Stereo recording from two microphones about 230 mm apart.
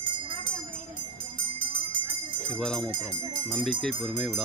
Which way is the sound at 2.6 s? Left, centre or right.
Centre.